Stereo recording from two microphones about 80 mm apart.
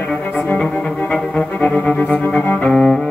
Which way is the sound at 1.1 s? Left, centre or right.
Centre.